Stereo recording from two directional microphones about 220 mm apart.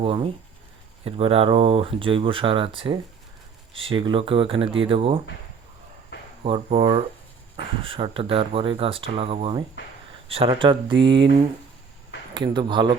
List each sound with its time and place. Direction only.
0.0 s speech: 25° right (ahead or behind)
6.4 s speech: 25° right (ahead or behind)
12.4 s speech: 20° right (ahead or behind)